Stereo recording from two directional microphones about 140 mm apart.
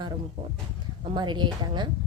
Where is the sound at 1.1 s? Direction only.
35° right (ahead or behind).